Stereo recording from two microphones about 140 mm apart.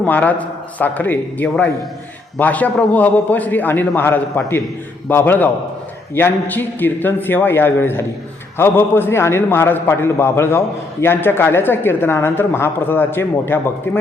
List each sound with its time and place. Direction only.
0.0 s a man's voice: 10° left (ahead or behind)